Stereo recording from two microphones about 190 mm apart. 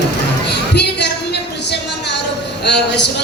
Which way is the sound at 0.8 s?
60° left (ahead or behind).